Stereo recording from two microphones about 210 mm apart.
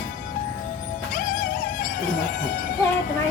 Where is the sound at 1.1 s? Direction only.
40° left (ahead or behind).